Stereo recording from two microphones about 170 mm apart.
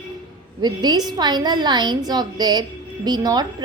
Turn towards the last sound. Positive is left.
turn(degrees=-25)  # may be behind; listen again after turning